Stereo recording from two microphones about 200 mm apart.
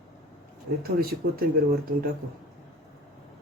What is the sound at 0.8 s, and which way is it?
Speech, 50° right (ahead or behind).